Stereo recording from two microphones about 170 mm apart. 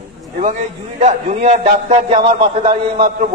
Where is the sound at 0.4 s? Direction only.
45° right (ahead or behind).